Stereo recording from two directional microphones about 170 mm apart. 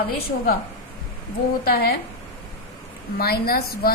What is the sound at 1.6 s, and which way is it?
Speech, 65° left (ahead or behind).